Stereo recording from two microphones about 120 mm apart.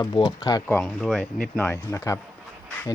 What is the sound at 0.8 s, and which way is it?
Speech, 5° left (ahead or behind).